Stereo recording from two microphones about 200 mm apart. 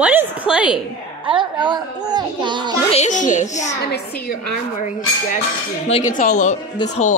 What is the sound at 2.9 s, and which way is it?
Speech, 35° left (ahead or behind).